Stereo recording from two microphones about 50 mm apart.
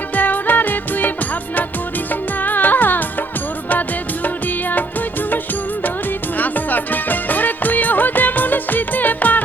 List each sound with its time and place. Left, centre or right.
0.1 s music of bollywood: left
2.4 s music: left